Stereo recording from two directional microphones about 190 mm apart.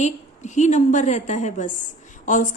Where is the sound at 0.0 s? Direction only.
40° left (ahead or behind).